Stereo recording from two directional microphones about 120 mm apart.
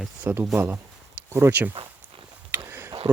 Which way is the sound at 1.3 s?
20° right (ahead or behind).